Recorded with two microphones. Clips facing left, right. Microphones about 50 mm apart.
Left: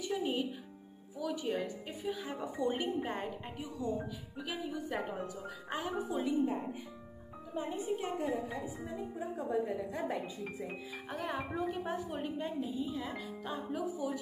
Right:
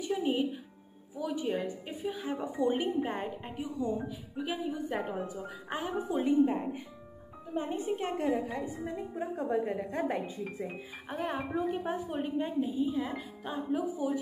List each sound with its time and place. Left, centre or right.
0.0 s a woman's voice: centre
5.7 s a woman's voice: right
11.1 s speech: right